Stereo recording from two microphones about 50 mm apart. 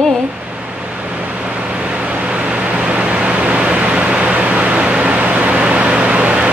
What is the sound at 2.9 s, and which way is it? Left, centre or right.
Vehicle, right.